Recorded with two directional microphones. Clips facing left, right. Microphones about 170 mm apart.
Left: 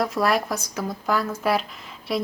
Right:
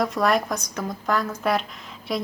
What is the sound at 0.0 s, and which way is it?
A woman's voice, 5° left (ahead or behind).